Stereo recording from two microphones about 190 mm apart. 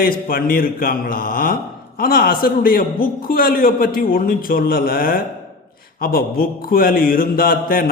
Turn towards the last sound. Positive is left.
turn(degrees=50)  # may be behind; listen again after turning